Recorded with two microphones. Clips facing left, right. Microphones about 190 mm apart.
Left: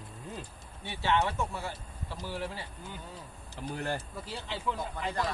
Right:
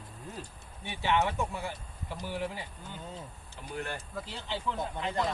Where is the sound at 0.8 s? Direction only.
15° right (ahead or behind).